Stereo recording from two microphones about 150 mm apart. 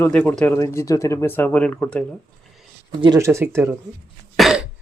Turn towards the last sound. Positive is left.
turn(degrees=0)  # may be behind; listen again after turning